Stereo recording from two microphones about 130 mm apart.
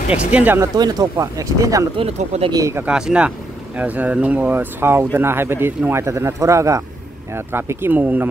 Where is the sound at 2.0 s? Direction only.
55° right (ahead or behind).